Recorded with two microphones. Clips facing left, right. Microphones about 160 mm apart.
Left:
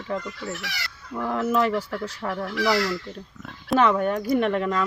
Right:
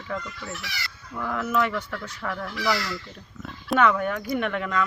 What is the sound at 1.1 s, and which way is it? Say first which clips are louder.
Speech: left 3 dB; 30° left (ahead or behind).